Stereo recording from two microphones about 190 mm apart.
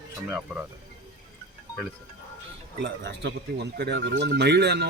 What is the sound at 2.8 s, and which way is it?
Speech, 65° right (ahead or behind).